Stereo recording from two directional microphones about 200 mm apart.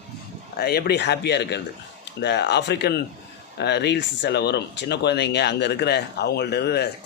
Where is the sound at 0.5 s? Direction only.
50° left (ahead or behind).